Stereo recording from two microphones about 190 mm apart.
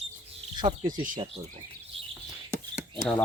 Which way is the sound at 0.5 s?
25° right (ahead or behind).